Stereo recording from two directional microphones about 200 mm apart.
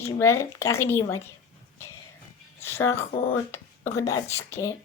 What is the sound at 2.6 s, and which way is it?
Speech, 10° left (ahead or behind).